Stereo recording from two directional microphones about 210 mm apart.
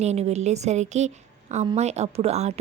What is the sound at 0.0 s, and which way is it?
A woman's voice, 30° right (ahead or behind).